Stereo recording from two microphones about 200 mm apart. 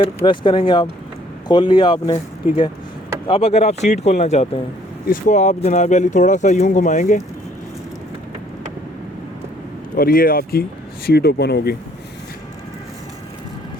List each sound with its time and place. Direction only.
0.3 s speech: 25° left (ahead or behind)
3.2 s speech: 30° left (ahead or behind)
9.9 s speech: 45° left (ahead or behind)